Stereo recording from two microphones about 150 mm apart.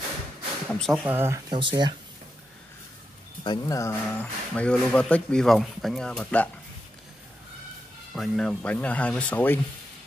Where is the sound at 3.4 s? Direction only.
30° left (ahead or behind).